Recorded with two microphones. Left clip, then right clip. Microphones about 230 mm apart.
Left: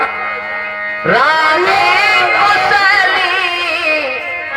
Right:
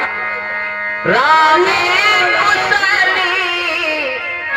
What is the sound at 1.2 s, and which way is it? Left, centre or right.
Music, centre.